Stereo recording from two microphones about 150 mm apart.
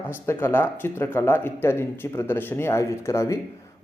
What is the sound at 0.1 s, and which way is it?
Speech, 15° left (ahead or behind).